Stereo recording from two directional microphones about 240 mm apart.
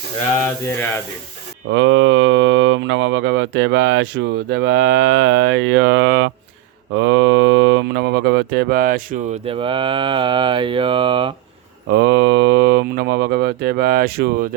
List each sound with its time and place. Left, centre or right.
1.7 s speech: right
9.5 s speech: right
11.9 s speech: right